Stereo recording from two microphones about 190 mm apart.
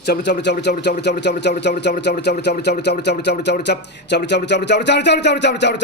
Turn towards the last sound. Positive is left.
turn(degrees=65)  # may be behind; listen again after turning